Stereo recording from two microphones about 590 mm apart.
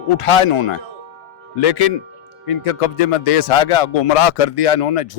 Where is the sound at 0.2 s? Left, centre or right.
Left.